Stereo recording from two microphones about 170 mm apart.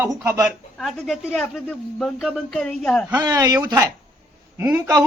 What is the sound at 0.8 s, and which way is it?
A woman's voice, centre (ahead or behind).